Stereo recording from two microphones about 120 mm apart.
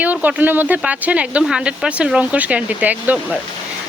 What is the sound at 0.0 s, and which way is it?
A woman's voice, 15° right (ahead or behind).